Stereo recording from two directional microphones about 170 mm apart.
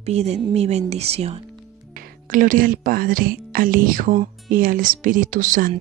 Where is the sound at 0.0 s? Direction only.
40° right (ahead or behind).